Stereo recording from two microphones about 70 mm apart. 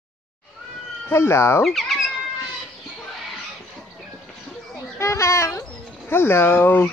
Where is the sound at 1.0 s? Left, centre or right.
Left.